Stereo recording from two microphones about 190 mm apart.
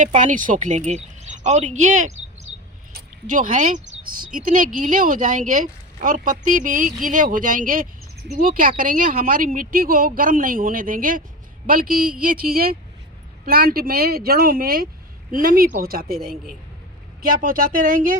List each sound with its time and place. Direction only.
0.0 s speech: 40° right (ahead or behind)